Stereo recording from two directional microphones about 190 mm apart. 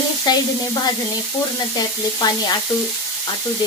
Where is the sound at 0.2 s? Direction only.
20° left (ahead or behind).